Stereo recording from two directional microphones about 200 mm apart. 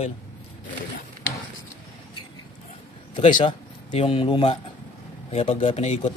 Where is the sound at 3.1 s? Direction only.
25° left (ahead or behind).